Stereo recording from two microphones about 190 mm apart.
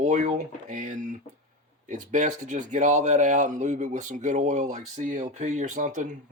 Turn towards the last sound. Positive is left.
turn(degrees=-40)  # may be behind; listen again after turning